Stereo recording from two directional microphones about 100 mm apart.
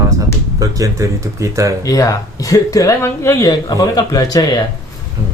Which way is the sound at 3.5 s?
40° left (ahead or behind).